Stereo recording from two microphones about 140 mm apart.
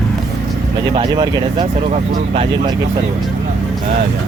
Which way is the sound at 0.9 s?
35° right (ahead or behind).